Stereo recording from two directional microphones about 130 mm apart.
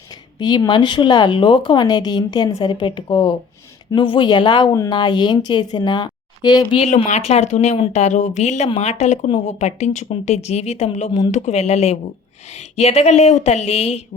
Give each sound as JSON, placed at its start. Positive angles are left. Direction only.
{"t": 0.3, "sound": "a woman's voice", "side_deg": 35}
{"t": 6.7, "sound": "speech", "side_deg": 55}